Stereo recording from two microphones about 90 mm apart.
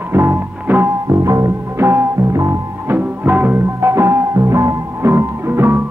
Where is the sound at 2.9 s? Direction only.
20° right (ahead or behind).